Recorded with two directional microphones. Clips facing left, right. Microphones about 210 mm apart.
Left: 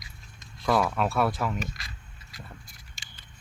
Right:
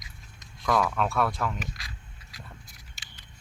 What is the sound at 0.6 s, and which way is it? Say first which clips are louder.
Speech: left 1 dB; 5° left (ahead or behind).